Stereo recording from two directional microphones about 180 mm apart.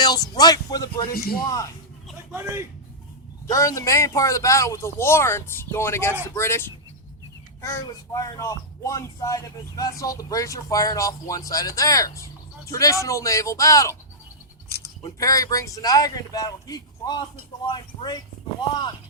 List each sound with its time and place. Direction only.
0.0 s speech: 20° left (ahead or behind)
1.1 s a man's voice: 55° left (ahead or behind)
1.5 s speech: 20° left (ahead or behind)
2.3 s a man's voice: 15° right (ahead or behind)
3.5 s speech: 15° left (ahead or behind)
15.0 s speech: 20° left (ahead or behind)